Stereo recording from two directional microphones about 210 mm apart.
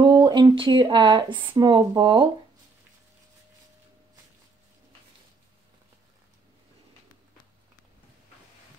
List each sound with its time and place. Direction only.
0.0 s speech: 20° right (ahead or behind)